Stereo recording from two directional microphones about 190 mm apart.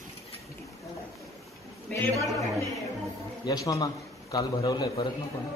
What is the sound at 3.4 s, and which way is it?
A man's voice, 20° left (ahead or behind).